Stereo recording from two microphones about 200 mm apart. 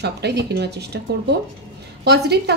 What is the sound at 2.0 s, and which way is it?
Speech, 55° right (ahead or behind).